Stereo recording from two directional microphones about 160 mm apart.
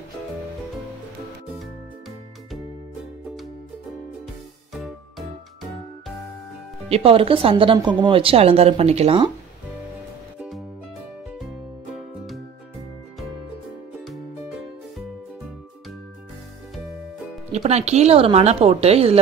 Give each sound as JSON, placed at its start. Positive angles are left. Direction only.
{"t": 1.6, "sound": "music", "side_deg": 0}
{"t": 4.7, "sound": "music", "side_deg": 0}
{"t": 6.9, "sound": "speech", "side_deg": -35}
{"t": 17.5, "sound": "speech", "side_deg": -45}